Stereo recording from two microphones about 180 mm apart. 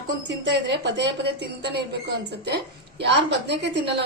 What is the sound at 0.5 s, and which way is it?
A woman's voice, 75° right (ahead or behind).